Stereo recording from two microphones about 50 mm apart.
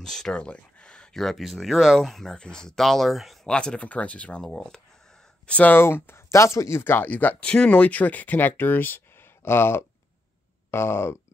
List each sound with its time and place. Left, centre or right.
0.0 s a sound: centre
1.1 s speech: centre
2.3 s speech: centre
3.4 s speech: centre
5.7 s speech: left
6.3 s speech: left
6.8 s speech: left
7.1 s speech: left
7.4 s speech: centre
7.8 s speech: left
9.4 s a sound: left